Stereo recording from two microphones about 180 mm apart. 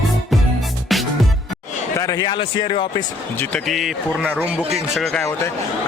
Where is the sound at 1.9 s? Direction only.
20° left (ahead or behind).